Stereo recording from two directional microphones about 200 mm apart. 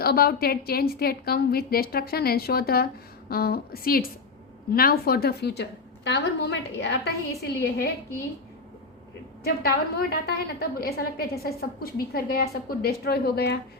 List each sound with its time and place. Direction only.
0.0 s a woman's voice: 50° left (ahead or behind)
9.4 s a woman's voice: 50° left (ahead or behind)